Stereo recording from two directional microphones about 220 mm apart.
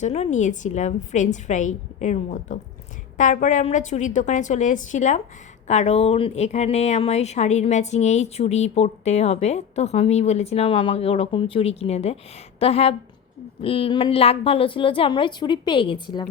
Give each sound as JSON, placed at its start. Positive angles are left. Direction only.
{"t": 0.0, "sound": "a woman's voice", "side_deg": 30}